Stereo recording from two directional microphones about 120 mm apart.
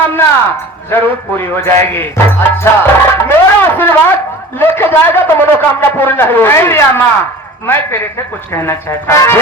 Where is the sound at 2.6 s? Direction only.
20° left (ahead or behind).